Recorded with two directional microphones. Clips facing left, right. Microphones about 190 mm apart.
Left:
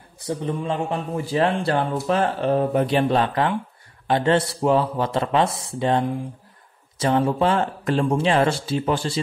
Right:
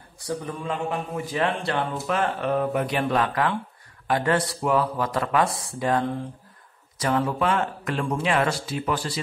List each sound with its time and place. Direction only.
0.2 s speech: 25° left (ahead or behind)